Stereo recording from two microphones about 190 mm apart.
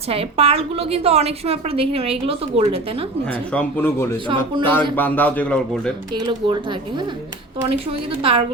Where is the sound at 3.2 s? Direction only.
5° left (ahead or behind).